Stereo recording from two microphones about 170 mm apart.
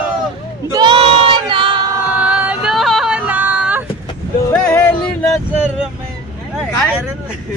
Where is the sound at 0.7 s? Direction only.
25° right (ahead or behind).